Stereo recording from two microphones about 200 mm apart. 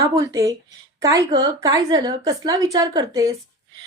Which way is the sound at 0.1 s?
20° right (ahead or behind).